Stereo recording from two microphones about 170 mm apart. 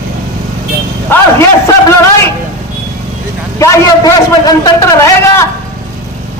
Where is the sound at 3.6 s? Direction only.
20° left (ahead or behind).